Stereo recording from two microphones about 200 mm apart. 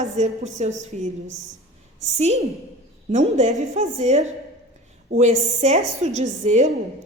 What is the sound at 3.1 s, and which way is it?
A woman's voice, 35° right (ahead or behind).